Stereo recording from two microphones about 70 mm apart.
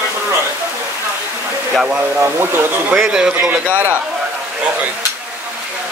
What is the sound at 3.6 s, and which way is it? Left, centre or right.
Speech, right.